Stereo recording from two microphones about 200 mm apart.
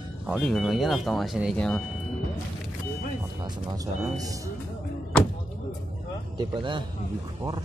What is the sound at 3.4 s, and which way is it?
Speech, 20° right (ahead or behind).